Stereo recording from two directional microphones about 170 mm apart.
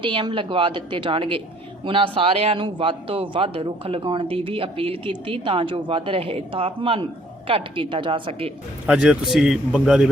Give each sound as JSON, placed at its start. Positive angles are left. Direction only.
{"t": 0.0, "sound": "a woman's voice", "side_deg": -30}
{"t": 8.9, "sound": "speech", "side_deg": -5}